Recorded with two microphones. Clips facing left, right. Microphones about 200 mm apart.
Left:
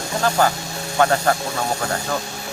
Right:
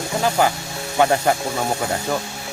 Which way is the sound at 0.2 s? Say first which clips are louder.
Even; 15° right (ahead or behind).